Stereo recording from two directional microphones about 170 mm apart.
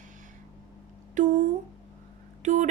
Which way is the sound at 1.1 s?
45° right (ahead or behind).